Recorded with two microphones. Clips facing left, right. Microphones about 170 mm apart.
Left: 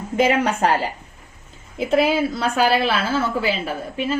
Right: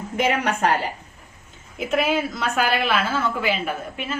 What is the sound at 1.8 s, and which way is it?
Speech, 30° left (ahead or behind).